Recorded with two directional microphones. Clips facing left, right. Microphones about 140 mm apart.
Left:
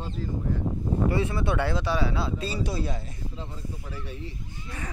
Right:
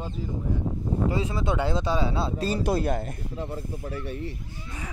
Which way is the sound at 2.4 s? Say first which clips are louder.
Right 5 dB; 50° right (ahead or behind).